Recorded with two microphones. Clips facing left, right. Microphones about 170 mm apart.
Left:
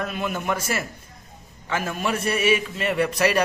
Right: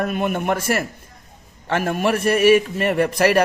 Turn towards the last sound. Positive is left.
turn(degrees=-55)  # may be behind; listen again after turning